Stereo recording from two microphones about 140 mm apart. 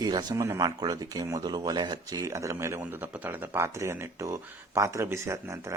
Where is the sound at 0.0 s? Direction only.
30° right (ahead or behind).